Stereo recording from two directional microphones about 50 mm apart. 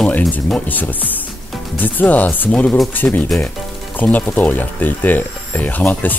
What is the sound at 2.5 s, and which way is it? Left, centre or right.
Speech, centre.